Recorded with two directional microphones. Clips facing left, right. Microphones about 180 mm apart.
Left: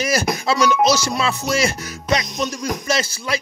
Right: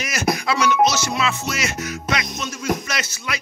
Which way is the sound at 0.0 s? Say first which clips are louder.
Left 3 dB; 30° left (ahead or behind).